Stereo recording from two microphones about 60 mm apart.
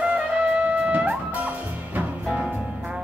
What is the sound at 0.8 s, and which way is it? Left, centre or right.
Music, right.